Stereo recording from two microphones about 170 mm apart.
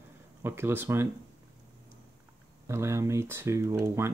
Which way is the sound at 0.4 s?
15° right (ahead or behind).